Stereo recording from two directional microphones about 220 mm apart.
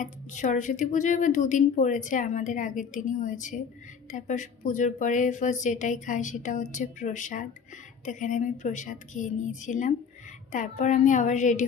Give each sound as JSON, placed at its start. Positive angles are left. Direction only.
{"t": 0.0, "sound": "a woman's voice", "side_deg": 35}